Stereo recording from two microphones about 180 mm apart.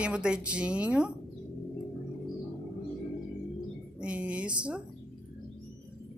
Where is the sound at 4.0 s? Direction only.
5° right (ahead or behind).